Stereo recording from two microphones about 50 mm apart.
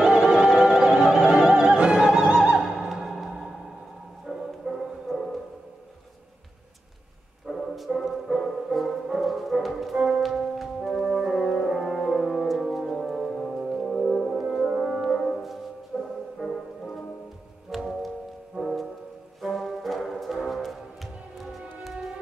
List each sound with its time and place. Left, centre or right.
0.0 s music: centre
1.8 s opera: centre
4.3 s music: centre
7.4 s music: centre
11.4 s music: centre
14.4 s music: centre
14.7 s french horn: centre
15.9 s music: centre